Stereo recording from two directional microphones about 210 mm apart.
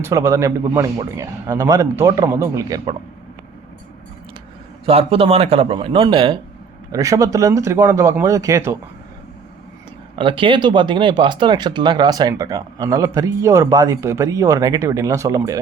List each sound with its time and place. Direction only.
0.0 s speech: 15° right (ahead or behind)
4.9 s a man's voice: 25° right (ahead or behind)
10.2 s speech: 25° right (ahead or behind)